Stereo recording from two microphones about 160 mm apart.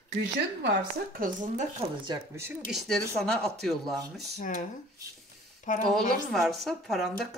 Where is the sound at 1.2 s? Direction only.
55° right (ahead or behind).